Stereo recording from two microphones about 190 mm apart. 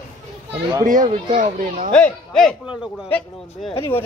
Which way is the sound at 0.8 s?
40° right (ahead or behind).